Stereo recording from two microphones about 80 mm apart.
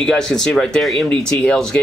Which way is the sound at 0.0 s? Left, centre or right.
Centre.